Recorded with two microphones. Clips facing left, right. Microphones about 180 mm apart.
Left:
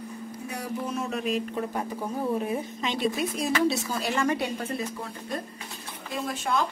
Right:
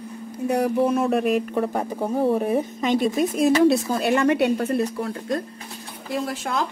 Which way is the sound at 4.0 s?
65° right (ahead or behind).